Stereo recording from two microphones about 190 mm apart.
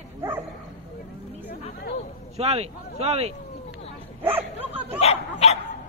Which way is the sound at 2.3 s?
35° right (ahead or behind).